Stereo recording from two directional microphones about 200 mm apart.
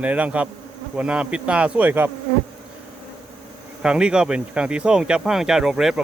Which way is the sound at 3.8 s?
5° right (ahead or behind).